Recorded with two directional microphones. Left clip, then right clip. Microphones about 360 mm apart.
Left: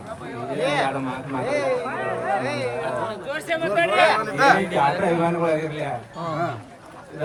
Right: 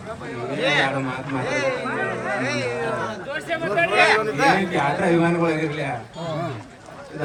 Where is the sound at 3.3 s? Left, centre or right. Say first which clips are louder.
Left 2 dB; left.